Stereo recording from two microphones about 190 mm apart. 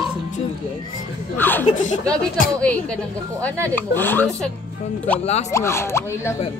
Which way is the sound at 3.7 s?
10° left (ahead or behind).